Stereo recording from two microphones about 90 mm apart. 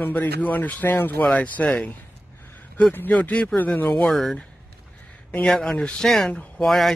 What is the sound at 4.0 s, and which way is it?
Speech, centre (ahead or behind).